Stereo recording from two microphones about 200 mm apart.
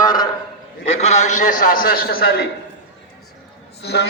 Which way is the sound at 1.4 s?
45° left (ahead or behind).